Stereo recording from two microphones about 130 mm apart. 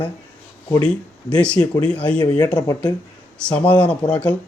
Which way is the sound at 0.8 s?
10° left (ahead or behind).